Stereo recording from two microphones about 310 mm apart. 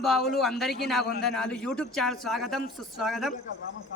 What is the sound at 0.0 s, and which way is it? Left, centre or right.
A man's voice, centre.